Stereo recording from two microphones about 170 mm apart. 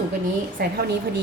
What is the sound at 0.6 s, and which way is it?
Speech, 65° right (ahead or behind).